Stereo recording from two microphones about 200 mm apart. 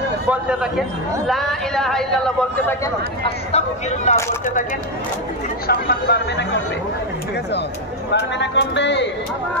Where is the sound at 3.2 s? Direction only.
35° left (ahead or behind).